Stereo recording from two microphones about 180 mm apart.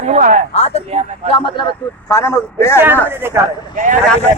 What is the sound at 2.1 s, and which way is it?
Speech, 15° left (ahead or behind).